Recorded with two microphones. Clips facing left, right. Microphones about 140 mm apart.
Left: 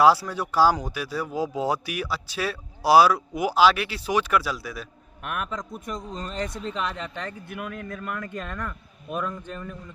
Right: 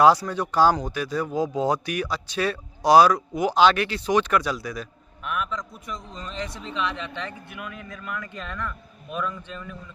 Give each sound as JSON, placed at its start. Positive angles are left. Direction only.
{"t": 0.0, "sound": "speech", "side_deg": 5}
{"t": 5.2, "sound": "speech", "side_deg": 55}